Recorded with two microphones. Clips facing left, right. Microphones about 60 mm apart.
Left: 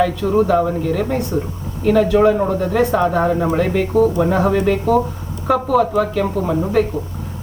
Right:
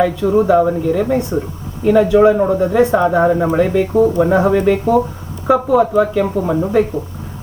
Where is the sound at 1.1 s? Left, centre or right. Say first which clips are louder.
Right 3 dB; right.